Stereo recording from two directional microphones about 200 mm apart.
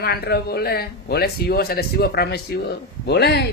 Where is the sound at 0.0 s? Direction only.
50° left (ahead or behind).